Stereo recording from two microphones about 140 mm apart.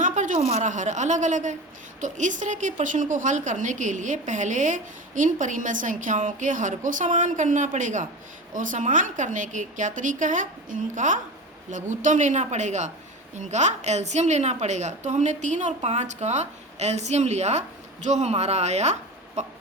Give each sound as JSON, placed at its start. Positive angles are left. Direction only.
{"t": 0.0, "sound": "a woman's voice", "side_deg": -65}